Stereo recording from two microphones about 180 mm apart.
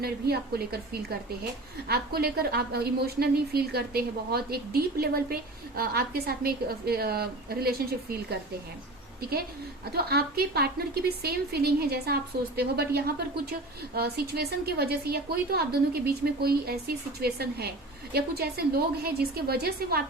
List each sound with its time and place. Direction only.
0.0 s a woman's voice: 60° right (ahead or behind)
1.9 s a woman's voice: 60° right (ahead or behind)
9.9 s a woman's voice: 60° right (ahead or behind)